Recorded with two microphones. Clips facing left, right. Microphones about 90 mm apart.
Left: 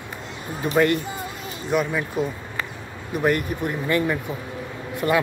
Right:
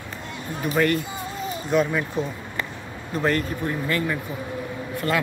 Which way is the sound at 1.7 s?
5° left (ahead or behind).